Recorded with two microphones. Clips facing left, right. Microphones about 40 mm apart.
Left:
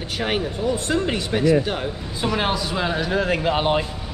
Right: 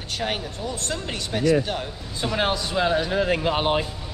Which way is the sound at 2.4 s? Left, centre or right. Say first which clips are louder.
Right 2 dB; centre.